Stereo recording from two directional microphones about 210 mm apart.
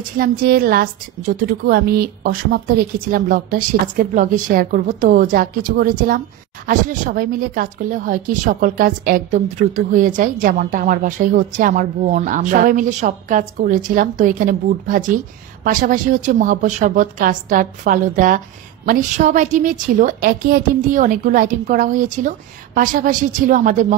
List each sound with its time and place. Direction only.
0.2 s a woman's voice: 45° right (ahead or behind)